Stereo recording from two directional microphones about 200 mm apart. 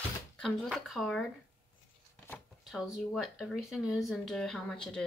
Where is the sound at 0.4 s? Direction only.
Centre (ahead or behind).